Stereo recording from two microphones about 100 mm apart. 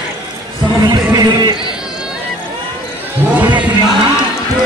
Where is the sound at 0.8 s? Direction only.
40° right (ahead or behind).